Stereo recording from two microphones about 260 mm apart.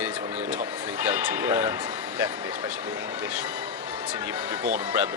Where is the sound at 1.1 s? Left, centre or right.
Centre.